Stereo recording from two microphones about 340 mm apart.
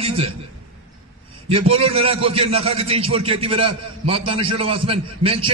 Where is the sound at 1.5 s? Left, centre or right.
Centre.